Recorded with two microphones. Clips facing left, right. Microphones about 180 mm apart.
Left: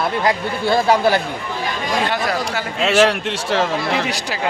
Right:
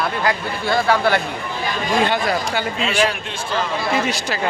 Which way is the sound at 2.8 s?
70° left (ahead or behind).